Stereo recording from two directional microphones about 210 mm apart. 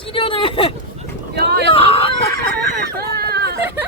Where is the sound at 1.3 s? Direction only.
50° right (ahead or behind).